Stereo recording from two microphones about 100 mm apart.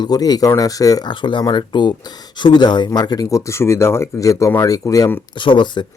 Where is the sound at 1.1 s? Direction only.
50° left (ahead or behind); by 5.1 s 35° left (ahead or behind).